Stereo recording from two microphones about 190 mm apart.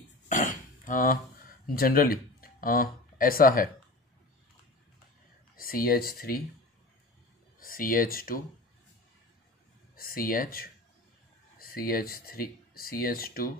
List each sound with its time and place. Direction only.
0.3 s a sound: 45° left (ahead or behind)
1.8 s speech: 50° left (ahead or behind)
5.6 s speech: 50° left (ahead or behind)
7.5 s speech: 50° left (ahead or behind)
9.9 s speech: 50° left (ahead or behind)